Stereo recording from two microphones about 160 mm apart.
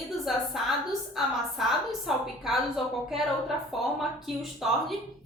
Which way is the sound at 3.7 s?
Centre (ahead or behind).